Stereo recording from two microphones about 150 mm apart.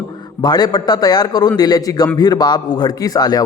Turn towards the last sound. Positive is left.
turn(degrees=25)  # may be behind; listen again after turning